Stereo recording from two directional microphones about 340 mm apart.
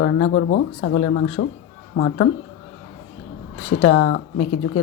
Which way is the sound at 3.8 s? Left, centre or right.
Left.